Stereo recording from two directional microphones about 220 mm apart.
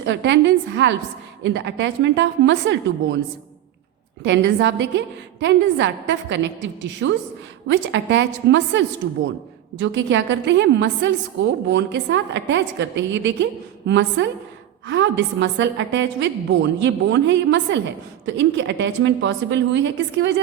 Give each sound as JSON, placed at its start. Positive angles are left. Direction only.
{"t": 0.0, "sound": "a woman's voice", "side_deg": -55}
{"t": 4.2, "sound": "a woman's voice", "side_deg": -55}